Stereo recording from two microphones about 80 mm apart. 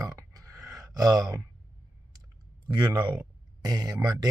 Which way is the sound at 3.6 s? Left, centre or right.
Right.